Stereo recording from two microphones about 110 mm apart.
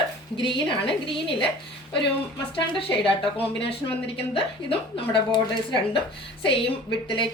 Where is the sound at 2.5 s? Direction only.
55° left (ahead or behind).